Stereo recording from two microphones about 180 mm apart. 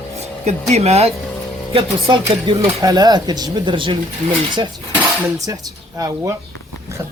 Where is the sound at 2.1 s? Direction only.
30° right (ahead or behind).